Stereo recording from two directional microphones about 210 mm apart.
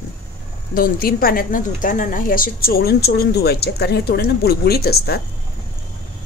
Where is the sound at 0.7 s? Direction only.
45° left (ahead or behind).